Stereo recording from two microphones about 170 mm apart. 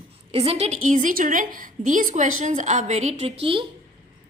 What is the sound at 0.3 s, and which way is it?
A woman's voice, 35° right (ahead or behind).